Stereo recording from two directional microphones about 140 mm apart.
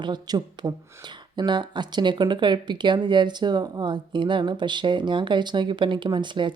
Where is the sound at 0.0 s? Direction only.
30° right (ahead or behind).